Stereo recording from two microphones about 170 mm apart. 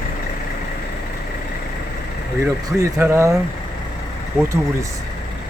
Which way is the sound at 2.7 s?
15° right (ahead or behind).